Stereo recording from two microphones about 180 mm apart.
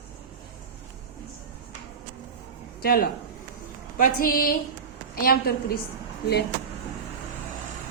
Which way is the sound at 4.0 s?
50° left (ahead or behind).